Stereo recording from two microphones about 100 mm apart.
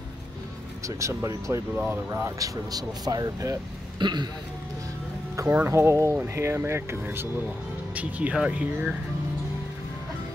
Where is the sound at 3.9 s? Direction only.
45° right (ahead or behind).